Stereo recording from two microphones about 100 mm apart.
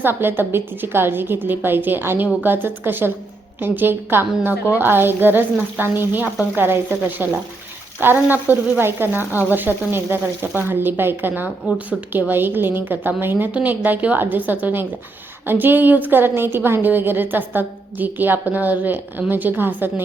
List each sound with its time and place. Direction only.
0.0 s a woman's voice: 20° right (ahead or behind)